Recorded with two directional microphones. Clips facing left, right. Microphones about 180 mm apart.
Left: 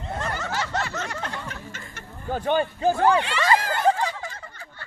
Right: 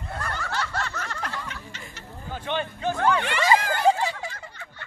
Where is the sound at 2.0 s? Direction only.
45° left (ahead or behind).